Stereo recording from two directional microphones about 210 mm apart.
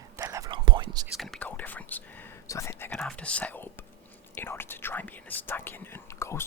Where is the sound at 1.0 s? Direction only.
Centre (ahead or behind).